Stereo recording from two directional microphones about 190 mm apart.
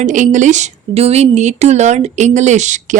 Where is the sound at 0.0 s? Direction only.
40° right (ahead or behind).